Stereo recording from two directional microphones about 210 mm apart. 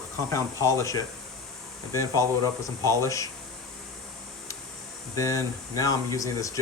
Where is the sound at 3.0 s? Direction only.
15° left (ahead or behind).